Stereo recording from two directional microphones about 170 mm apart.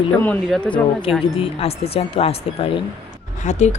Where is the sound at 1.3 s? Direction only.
35° left (ahead or behind).